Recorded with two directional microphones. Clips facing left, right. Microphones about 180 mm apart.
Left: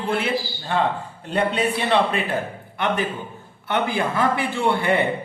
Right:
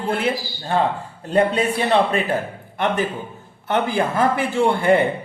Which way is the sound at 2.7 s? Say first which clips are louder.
Right 2 dB; 40° right (ahead or behind).